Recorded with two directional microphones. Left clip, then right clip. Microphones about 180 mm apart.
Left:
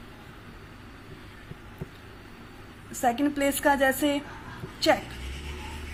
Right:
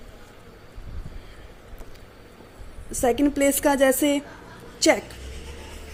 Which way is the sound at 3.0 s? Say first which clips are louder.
Right 4 dB; 60° right (ahead or behind).